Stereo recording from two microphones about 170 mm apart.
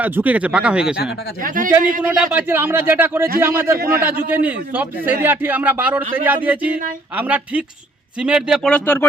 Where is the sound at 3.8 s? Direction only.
60° right (ahead or behind).